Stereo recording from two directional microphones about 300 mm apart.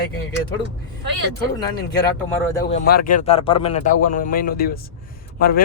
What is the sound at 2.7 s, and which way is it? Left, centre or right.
A man's voice, left.